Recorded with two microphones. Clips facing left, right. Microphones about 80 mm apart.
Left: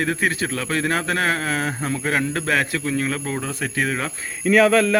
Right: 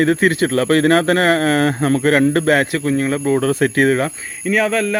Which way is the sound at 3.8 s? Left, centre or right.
Right.